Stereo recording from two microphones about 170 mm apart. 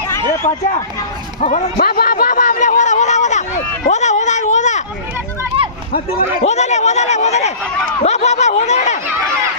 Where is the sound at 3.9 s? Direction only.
45° left (ahead or behind).